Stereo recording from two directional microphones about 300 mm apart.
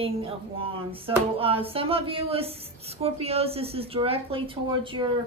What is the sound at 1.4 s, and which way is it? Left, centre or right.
Speech, centre.